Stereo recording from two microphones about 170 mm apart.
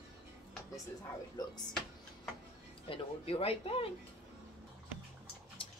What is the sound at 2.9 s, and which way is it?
Speech, 35° left (ahead or behind).